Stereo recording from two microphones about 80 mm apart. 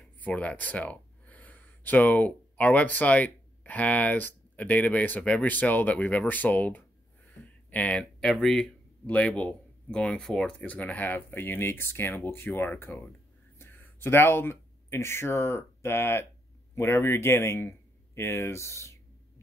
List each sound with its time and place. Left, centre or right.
0.2 s speech: centre
7.4 s a sound: centre
8.2 s speech: centre
9.0 s a man's voice: centre; by 18.9 s left